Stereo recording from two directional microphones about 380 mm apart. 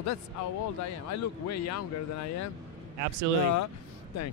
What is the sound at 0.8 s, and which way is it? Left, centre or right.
A man's voice, left.